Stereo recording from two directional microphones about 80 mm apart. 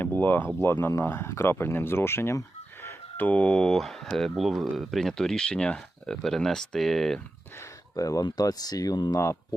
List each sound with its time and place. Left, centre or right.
0.0 s a sound: left
0.6 s speech: left; by 7.2 s centre
7.9 s speech: left
9.1 s speech: left